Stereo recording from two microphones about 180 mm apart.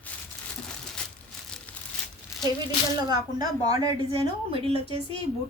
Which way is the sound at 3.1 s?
20° right (ahead or behind).